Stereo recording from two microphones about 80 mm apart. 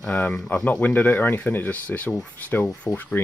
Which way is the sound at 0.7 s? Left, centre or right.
Centre.